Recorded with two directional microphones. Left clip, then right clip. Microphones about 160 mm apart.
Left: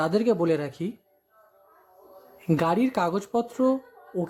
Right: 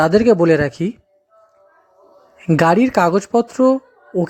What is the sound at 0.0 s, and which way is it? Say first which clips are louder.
Speech: right 11 dB; 35° right (ahead or behind).